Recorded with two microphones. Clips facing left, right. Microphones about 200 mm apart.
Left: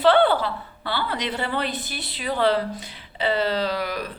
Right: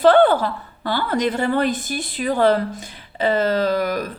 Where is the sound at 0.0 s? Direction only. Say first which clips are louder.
Right 4 dB; 45° right (ahead or behind).